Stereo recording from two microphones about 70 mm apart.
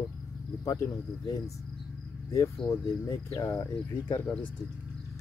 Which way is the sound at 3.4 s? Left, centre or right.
Left.